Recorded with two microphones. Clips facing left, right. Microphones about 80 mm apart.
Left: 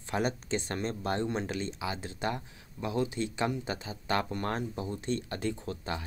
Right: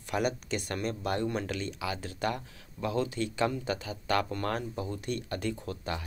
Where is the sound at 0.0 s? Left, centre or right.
Left.